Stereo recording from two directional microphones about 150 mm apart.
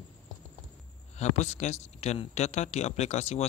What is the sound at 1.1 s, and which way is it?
Speech, 50° left (ahead or behind).